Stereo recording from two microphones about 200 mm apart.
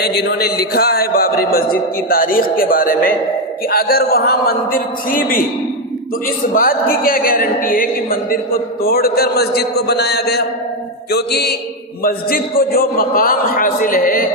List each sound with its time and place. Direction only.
0.0 s a man's voice: 55° left (ahead or behind)